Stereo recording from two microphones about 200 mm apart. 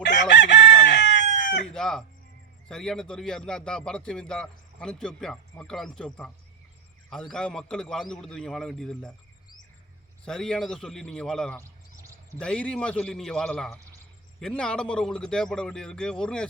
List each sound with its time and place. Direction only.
0.0 s chicken: 60° left (ahead or behind)
1.6 s chicken: 5° left (ahead or behind)
2.6 s a man's voice: 5° left (ahead or behind)
10.2 s a man's voice: 5° left (ahead or behind)